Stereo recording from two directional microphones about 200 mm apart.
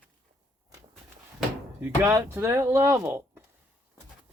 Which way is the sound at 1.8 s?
10° right (ahead or behind).